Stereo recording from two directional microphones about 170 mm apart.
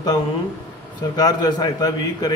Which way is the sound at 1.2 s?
25° left (ahead or behind).